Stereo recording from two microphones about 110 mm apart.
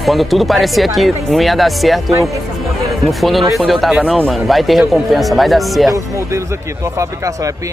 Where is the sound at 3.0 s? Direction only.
Centre (ahead or behind).